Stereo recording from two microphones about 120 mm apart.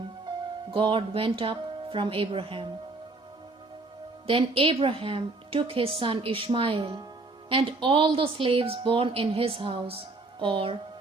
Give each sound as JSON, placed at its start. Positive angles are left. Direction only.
{"t": 0.7, "sound": "a woman's voice", "side_deg": -45}
{"t": 4.3, "sound": "a woman's voice", "side_deg": -50}